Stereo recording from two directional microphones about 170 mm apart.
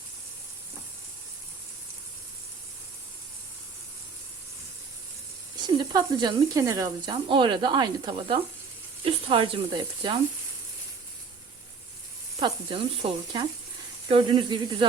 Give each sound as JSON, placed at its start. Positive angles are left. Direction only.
{"t": 5.6, "sound": "speech", "side_deg": -25}
{"t": 12.4, "sound": "speech", "side_deg": -25}